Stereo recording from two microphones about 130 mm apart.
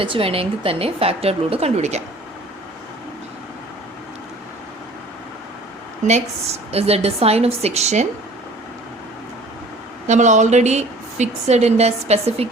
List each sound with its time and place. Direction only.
0.0 s a woman's voice: 45° right (ahead or behind)
6.1 s a woman's voice: 55° right (ahead or behind)
10.1 s a woman's voice: 65° right (ahead or behind)